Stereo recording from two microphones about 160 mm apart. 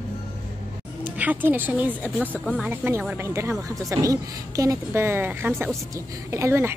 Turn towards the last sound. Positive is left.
turn(degrees=-15)  # may be behind; listen again after turning